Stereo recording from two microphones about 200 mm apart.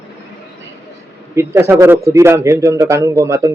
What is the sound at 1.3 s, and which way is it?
A man's voice, 15° right (ahead or behind).